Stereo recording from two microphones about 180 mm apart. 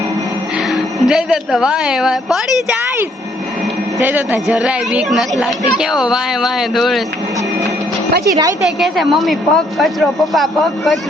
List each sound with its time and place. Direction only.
0.7 s a woman's voice: 5° right (ahead or behind)
4.0 s speech: 10° right (ahead or behind)
8.2 s a woman's voice: 20° right (ahead or behind)
8.6 s speech: centre (ahead or behind)